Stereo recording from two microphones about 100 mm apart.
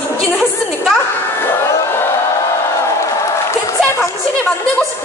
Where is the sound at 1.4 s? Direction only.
25° left (ahead or behind).